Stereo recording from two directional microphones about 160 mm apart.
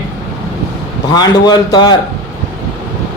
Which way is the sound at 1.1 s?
25° left (ahead or behind).